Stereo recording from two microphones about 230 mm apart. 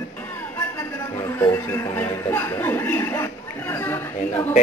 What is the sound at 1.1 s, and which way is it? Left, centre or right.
A man's voice, centre.